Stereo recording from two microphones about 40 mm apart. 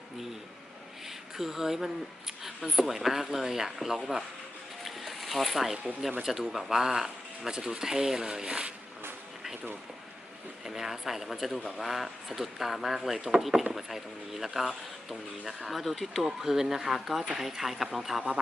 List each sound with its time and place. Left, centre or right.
1.4 s speech: centre
4.8 s boat: centre
6.2 s speech: centre
10.7 s speech: centre
13.1 s speech: centre